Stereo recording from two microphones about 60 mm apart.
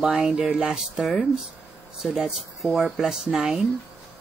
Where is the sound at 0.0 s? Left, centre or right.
Centre.